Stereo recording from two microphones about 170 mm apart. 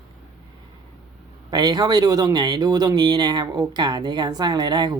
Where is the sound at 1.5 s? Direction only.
25° right (ahead or behind).